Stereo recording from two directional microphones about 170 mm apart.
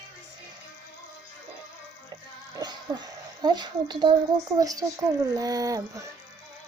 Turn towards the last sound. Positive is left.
turn(degrees=-20)  # may be behind; listen again after turning